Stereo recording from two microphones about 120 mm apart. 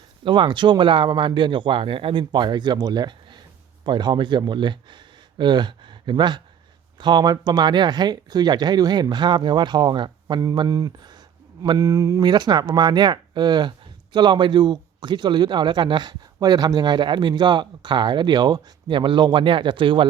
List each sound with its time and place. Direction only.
0.3 s speech: 45° right (ahead or behind)
11.8 s speech: 25° right (ahead or behind); by 20.1 s 45° right (ahead or behind)